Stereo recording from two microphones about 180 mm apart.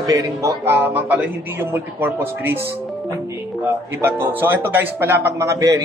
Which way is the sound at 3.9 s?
10° right (ahead or behind).